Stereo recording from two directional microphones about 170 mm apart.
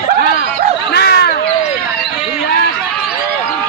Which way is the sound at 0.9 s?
70° left (ahead or behind).